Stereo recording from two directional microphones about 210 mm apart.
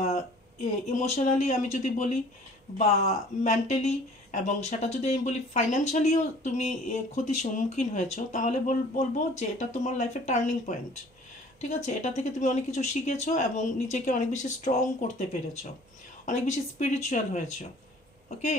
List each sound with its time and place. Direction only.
0.8 s speech: 35° left (ahead or behind)